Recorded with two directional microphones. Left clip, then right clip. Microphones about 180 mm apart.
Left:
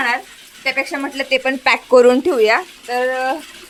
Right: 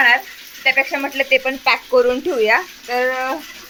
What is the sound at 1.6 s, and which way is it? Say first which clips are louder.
Speech: left 8 dB; 65° left (ahead or behind).